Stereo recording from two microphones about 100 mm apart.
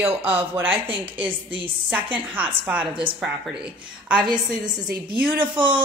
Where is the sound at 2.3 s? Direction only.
15° right (ahead or behind).